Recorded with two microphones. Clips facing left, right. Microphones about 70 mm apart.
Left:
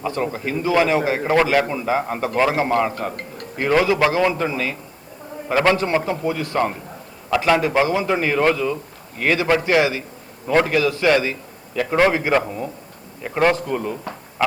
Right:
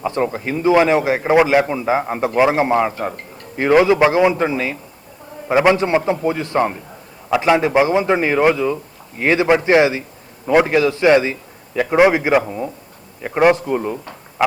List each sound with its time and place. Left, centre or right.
0.0 s a man's voice: right